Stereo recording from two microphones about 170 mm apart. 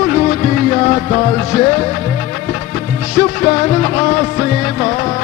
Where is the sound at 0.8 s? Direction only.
30° left (ahead or behind).